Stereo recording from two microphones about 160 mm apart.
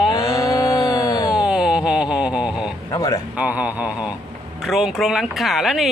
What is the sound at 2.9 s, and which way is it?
Speech, 20° left (ahead or behind).